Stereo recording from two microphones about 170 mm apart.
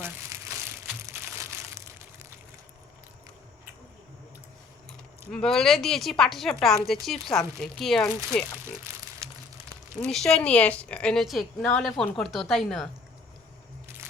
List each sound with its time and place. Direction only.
0.0 s crumpling: 15° right (ahead or behind)
5.3 s a woman's voice: 5° left (ahead or behind)
8.8 s crumpling: 15° right (ahead or behind)
10.0 s a woman's voice: 5° left (ahead or behind)